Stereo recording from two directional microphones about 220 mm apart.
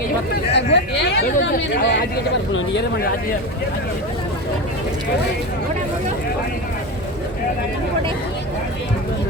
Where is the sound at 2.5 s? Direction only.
60° left (ahead or behind).